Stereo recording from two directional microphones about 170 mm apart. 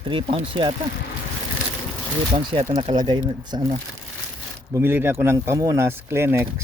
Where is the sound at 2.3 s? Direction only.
30° right (ahead or behind).